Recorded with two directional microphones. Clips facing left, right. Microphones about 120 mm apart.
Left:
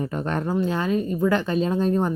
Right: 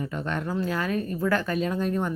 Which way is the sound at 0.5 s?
25° left (ahead or behind).